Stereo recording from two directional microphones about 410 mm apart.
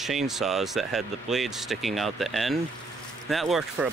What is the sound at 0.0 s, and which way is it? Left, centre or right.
Speech, centre.